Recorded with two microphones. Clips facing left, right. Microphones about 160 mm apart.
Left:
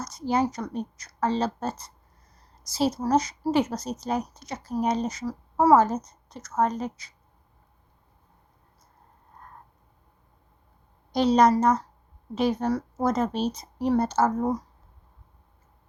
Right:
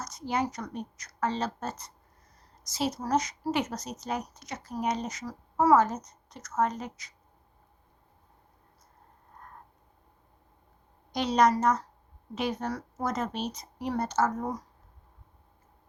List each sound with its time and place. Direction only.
0.0 s a woman's voice: 30° left (ahead or behind)
11.1 s a woman's voice: 30° left (ahead or behind)